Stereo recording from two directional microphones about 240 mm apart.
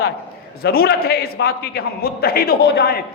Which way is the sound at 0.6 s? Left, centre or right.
Left.